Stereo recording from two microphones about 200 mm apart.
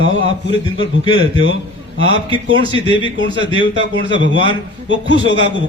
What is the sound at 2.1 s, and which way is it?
Speech, 25° right (ahead or behind).